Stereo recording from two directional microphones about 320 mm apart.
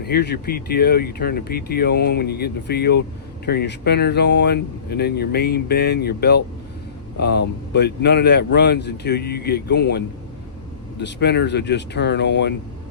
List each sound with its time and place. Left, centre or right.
0.1 s speech: left
11.0 s speech: left